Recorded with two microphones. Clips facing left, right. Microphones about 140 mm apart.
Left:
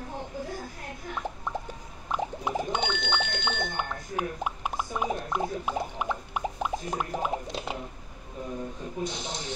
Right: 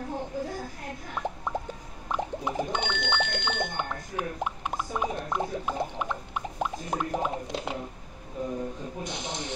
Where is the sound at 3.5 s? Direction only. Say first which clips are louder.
Right 1 dB; 15° left (ahead or behind).